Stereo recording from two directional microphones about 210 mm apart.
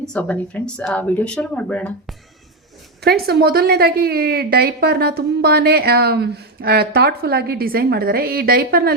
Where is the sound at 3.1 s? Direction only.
50° right (ahead or behind).